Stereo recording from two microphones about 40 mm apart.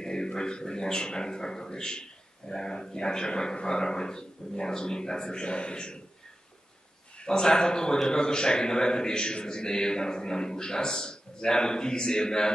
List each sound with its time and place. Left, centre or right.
0.0 s speech: centre
7.2 s a man's voice: centre